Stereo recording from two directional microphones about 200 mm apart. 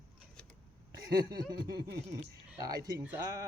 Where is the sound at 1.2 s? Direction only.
20° right (ahead or behind).